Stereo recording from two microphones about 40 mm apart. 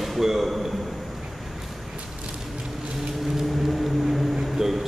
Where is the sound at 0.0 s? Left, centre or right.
Centre.